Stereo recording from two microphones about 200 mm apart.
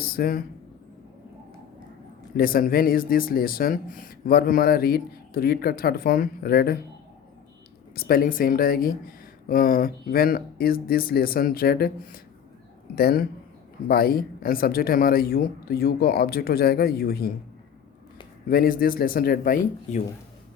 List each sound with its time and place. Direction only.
0.0 s speech: 50° left (ahead or behind)
2.3 s speech: 45° left (ahead or behind)
7.9 s speech: 50° left (ahead or behind)
18.4 s speech: 45° left (ahead or behind)